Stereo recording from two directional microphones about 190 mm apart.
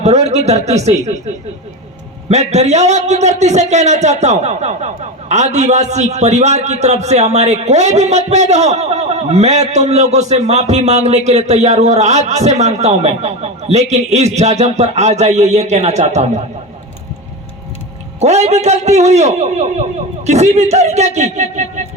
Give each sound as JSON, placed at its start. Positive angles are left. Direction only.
{"t": 0.0, "sound": "a man's voice", "side_deg": -35}
{"t": 2.3, "sound": "a man's voice", "side_deg": -35}
{"t": 18.2, "sound": "a man's voice", "side_deg": -35}